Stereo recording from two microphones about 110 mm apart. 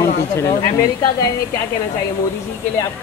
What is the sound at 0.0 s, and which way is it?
Speech, 25° left (ahead or behind).